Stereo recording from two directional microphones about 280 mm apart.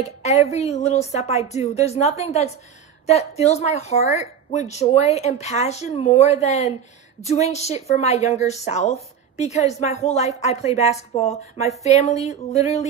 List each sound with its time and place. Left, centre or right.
0.2 s speech: left